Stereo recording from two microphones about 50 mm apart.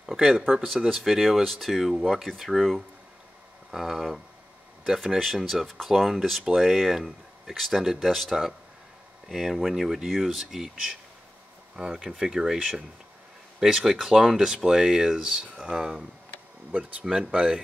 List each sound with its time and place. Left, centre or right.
0.0 s a sound: centre
0.9 s speech: centre
17.2 s speech: centre